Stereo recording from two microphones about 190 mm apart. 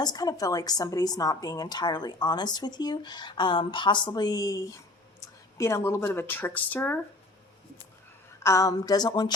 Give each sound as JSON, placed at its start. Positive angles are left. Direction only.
{"t": 0.0, "sound": "a woman's voice", "side_deg": 20}
{"t": 8.4, "sound": "a woman's voice", "side_deg": 15}